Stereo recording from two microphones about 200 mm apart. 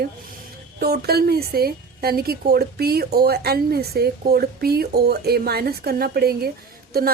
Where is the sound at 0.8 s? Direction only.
50° right (ahead or behind).